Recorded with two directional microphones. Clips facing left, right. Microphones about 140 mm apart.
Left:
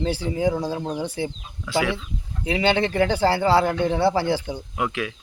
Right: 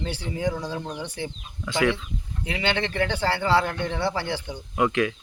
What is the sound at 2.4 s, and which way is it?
Speech, 35° left (ahead or behind).